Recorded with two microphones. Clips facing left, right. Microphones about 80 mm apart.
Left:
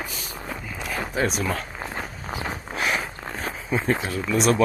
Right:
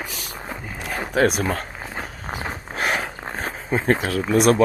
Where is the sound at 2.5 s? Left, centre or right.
Right.